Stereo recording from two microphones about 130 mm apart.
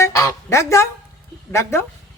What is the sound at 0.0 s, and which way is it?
Honk, 20° left (ahead or behind).